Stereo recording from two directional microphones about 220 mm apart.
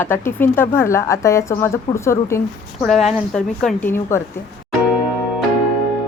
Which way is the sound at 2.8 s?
Centre (ahead or behind).